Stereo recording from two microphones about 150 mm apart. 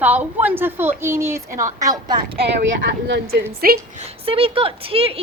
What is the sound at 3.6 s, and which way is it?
Speech, 75° right (ahead or behind).